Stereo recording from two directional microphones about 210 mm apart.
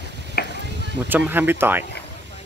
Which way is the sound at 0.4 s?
45° left (ahead or behind).